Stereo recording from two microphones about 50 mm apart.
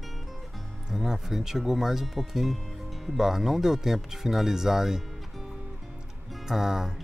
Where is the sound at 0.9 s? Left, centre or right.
Centre.